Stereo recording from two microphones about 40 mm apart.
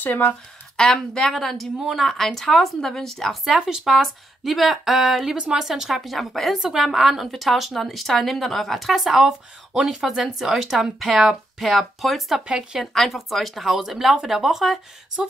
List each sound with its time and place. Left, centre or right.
0.0 s speech: left
0.7 s a woman's voice: centre
1.8 s a woman's voice: centre
2.0 s a woman's voice: centre
3.6 s speech: centre
6.0 s a woman's voice: centre
6.6 s a woman's voice: centre
12.4 s a woman's voice: right
12.9 s a woman's voice: centre